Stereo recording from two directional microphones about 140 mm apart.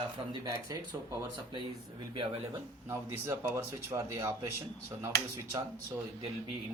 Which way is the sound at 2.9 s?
15° right (ahead or behind).